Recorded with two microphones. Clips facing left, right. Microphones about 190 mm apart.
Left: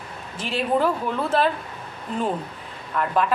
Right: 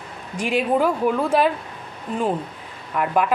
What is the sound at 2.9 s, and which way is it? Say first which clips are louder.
Speech: right 2 dB; 10° right (ahead or behind).